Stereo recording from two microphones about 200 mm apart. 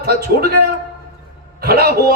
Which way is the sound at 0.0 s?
50° right (ahead or behind).